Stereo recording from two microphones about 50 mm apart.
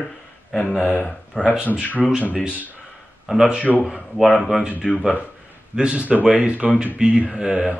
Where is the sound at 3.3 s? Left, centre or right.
Centre.